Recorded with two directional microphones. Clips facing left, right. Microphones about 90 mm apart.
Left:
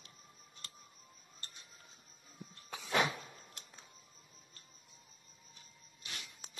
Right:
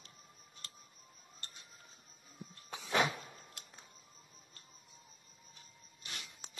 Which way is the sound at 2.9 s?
30° right (ahead or behind).